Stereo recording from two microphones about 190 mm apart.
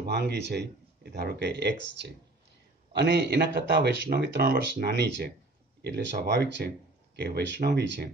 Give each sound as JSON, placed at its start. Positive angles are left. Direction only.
{"t": 0.0, "sound": "speech", "side_deg": -60}